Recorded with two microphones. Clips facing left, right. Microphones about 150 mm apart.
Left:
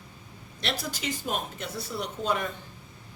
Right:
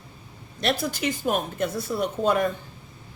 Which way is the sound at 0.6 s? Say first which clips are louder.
Right 7 dB; 50° right (ahead or behind).